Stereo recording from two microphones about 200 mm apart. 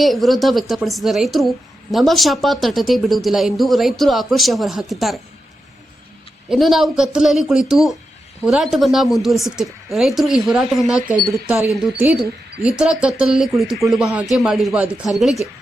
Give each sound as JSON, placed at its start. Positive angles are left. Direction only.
{"t": 0.0, "sound": "a woman's voice", "side_deg": 0}
{"t": 6.5, "sound": "a woman's voice", "side_deg": 0}
{"t": 11.0, "sound": "speech", "side_deg": -45}
{"t": 11.4, "sound": "a woman's voice", "side_deg": -10}